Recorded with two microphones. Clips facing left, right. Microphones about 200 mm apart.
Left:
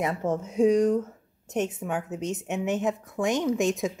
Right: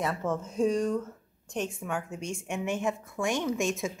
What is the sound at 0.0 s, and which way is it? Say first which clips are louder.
A woman's voice: left 3 dB; 15° left (ahead or behind).